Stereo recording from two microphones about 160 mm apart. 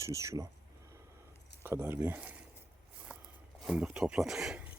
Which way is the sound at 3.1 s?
10° right (ahead or behind).